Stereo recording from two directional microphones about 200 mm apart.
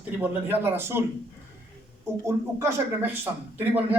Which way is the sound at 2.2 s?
10° right (ahead or behind).